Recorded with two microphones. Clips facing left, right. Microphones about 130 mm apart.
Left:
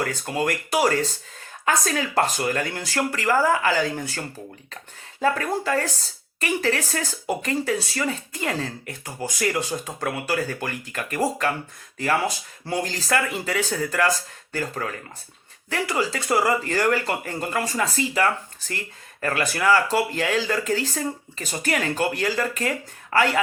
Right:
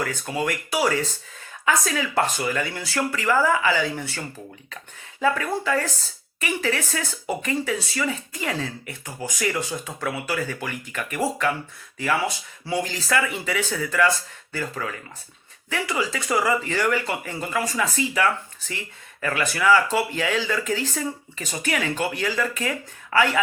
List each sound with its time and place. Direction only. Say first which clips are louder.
0.3 s speech: left 1 dB; 45° left (ahead or behind)
5.2 s speech: even; 40° left (ahead or behind)